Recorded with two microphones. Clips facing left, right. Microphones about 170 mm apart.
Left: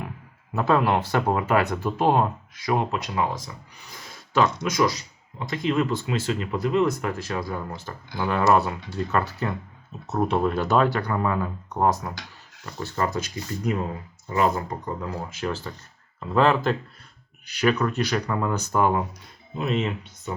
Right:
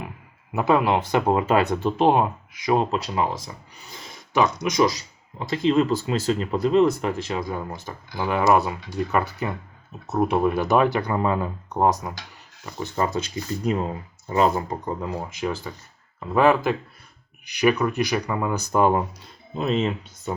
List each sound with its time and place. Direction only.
0.5 s speech: 15° right (ahead or behind)
5.4 s speech: 30° right (ahead or behind); by 18.8 s 10° right (ahead or behind)
19.5 s speech: 30° right (ahead or behind)